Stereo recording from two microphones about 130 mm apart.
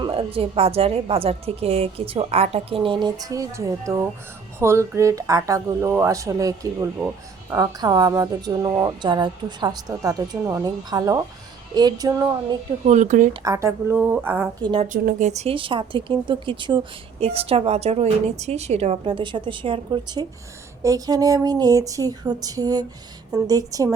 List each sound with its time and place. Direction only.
0.0 s a woman's voice: 45° right (ahead or behind); by 12.3 s 30° right (ahead or behind)
12.8 s speech: 65° right (ahead or behind)
13.4 s a woman's voice: 25° right (ahead or behind)
14.6 s a woman's voice: 40° right (ahead or behind)
14.9 s speech: 65° right (ahead or behind)
15.5 s a woman's voice: 40° right (ahead or behind)